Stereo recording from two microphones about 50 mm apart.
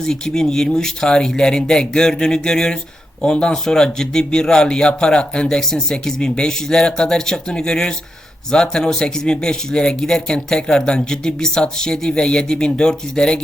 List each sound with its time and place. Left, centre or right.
0.0 s speech: centre